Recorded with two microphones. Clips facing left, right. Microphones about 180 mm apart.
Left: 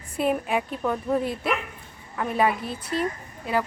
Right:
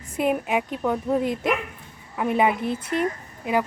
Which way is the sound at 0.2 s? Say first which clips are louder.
Right 1 dB; 10° right (ahead or behind).